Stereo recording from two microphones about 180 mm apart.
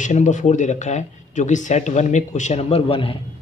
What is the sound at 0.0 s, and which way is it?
Speech, 40° left (ahead or behind).